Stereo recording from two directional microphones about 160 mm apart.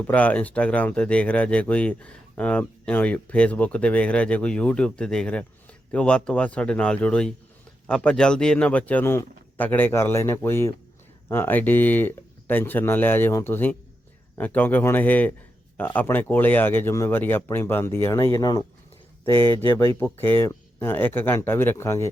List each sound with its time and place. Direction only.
0.1 s speech: 10° left (ahead or behind)
19.3 s speech: 30° right (ahead or behind)
19.6 s speech: 15° left (ahead or behind)